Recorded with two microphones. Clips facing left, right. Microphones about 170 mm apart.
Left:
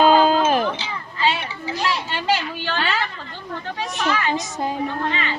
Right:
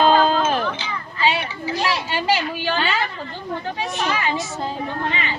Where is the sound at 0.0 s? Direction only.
10° left (ahead or behind).